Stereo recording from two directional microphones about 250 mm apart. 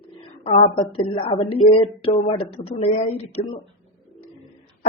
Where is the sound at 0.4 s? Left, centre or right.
Left.